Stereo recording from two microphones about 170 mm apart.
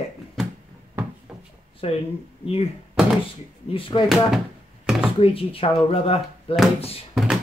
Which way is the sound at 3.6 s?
30° left (ahead or behind).